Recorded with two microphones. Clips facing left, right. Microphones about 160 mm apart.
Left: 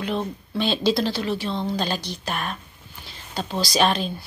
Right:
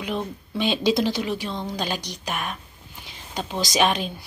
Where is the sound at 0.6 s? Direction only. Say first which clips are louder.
Even; 15° right (ahead or behind).